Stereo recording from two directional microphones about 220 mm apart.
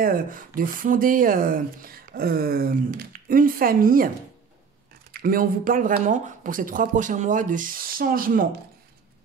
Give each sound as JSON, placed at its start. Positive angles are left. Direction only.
{"t": 0.0, "sound": "speech", "side_deg": -40}
{"t": 5.1, "sound": "speech", "side_deg": -40}